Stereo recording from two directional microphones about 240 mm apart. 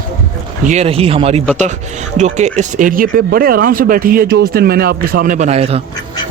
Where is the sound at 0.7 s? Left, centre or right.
Right.